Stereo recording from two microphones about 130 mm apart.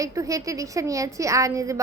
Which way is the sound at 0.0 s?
25° right (ahead or behind).